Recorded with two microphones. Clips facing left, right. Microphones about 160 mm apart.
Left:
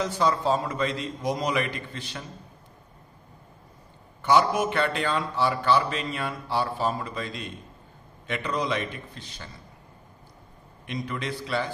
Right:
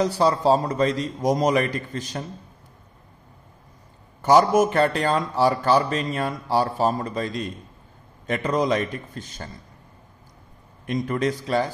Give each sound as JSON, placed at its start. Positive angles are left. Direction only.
{"t": 0.0, "sound": "a man's voice", "side_deg": -35}
{"t": 4.2, "sound": "a man's voice", "side_deg": -40}
{"t": 10.9, "sound": "a man's voice", "side_deg": -45}